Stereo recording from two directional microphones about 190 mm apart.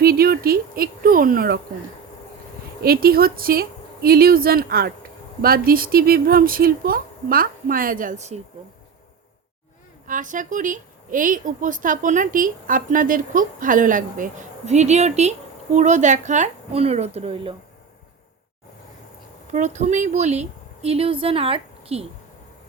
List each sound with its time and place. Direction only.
0.0 s a sound: 55° right (ahead or behind)
2.8 s a woman's voice: 50° right (ahead or behind)
10.1 s a woman's voice: 45° right (ahead or behind)
19.5 s a woman's voice: 40° right (ahead or behind)